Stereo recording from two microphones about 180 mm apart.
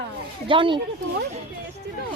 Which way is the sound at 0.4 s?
30° right (ahead or behind).